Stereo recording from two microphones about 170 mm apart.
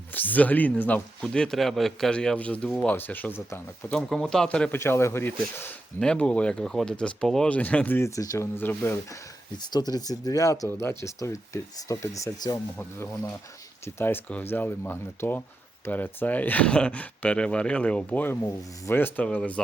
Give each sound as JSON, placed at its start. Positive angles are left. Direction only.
{"t": 0.1, "sound": "speech", "side_deg": 10}